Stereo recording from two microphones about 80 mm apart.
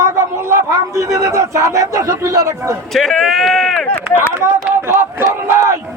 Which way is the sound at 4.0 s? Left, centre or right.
Right.